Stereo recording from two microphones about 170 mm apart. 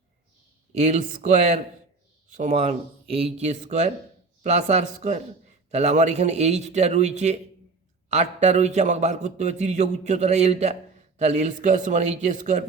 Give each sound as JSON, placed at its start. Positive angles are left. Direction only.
{"t": 0.7, "sound": "a man's voice", "side_deg": -40}